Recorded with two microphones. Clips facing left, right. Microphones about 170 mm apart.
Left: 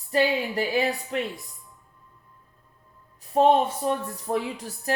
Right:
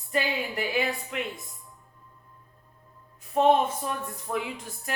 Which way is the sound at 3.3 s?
35° left (ahead or behind).